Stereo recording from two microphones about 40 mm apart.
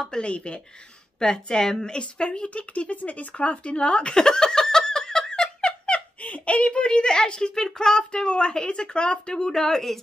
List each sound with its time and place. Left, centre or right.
0.2 s a woman's voice: left
6.2 s a woman's voice: left; by 9.9 s centre